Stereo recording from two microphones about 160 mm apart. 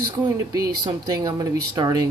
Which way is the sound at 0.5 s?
25° right (ahead or behind).